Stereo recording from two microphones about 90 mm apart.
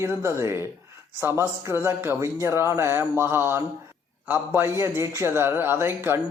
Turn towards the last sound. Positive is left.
turn(degrees=-25)  # may be behind; listen again after turning